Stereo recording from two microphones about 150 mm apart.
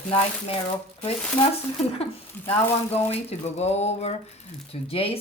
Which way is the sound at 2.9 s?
45° left (ahead or behind).